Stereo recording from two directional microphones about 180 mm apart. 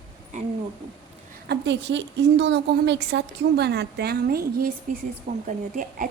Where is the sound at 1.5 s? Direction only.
75° right (ahead or behind).